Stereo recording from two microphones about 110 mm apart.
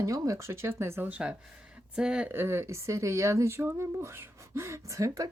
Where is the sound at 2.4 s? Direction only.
20° right (ahead or behind).